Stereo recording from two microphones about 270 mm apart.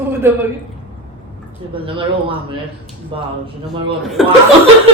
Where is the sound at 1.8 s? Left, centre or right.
Centre.